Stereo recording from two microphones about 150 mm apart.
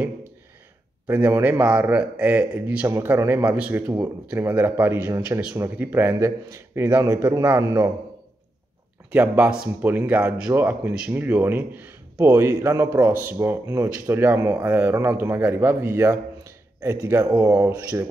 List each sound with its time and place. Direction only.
1.0 s speech: 15° right (ahead or behind)
3.8 s speech: 20° right (ahead or behind)
9.1 s speech: 10° right (ahead or behind)